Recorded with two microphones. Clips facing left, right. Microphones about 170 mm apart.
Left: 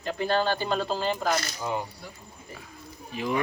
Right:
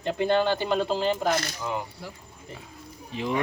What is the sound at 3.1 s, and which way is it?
Speech, 25° right (ahead or behind).